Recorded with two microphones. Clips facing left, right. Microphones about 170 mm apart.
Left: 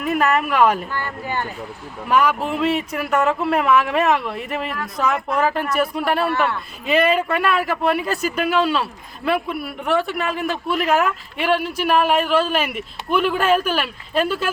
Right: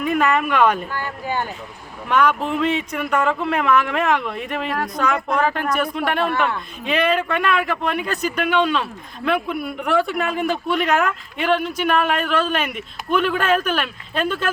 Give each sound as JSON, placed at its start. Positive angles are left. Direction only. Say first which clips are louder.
{"t": 0.0, "sound": "speech", "louder": "even", "side_deg": 5}
{"t": 0.9, "sound": "speech", "louder": "right 1 dB", "side_deg": -15}
{"t": 2.0, "sound": "speech", "louder": "even", "side_deg": 5}